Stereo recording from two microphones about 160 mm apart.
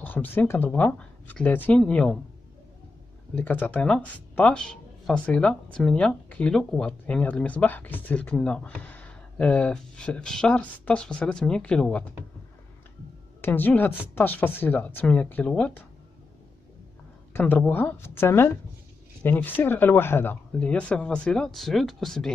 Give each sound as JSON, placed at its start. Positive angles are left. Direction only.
{"t": 0.0, "sound": "speech", "side_deg": 10}
{"t": 3.3, "sound": "speech", "side_deg": 10}
{"t": 13.4, "sound": "speech", "side_deg": 10}
{"t": 17.3, "sound": "speech", "side_deg": 10}